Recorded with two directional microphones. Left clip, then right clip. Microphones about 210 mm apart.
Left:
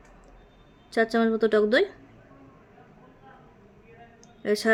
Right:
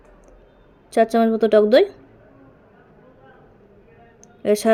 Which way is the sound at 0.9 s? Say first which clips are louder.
Right 7 dB; 15° right (ahead or behind).